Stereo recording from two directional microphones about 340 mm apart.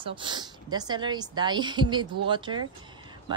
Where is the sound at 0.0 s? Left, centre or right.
Centre.